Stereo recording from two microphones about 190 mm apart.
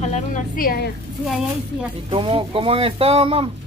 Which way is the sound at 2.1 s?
30° right (ahead or behind).